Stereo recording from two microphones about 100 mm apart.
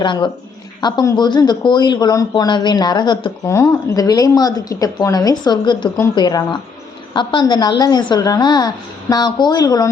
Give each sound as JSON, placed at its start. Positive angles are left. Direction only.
{"t": 0.0, "sound": "a woman's voice", "side_deg": 50}
{"t": 3.4, "sound": "a woman's voice", "side_deg": 30}